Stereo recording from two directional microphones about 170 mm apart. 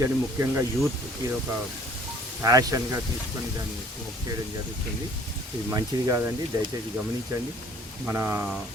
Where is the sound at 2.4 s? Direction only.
20° right (ahead or behind).